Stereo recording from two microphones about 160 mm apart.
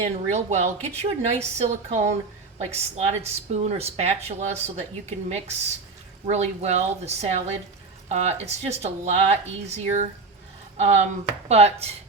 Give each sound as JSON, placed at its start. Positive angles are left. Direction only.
{"t": 0.0, "sound": "speech", "side_deg": -45}
{"t": 6.2, "sound": "speech", "side_deg": -45}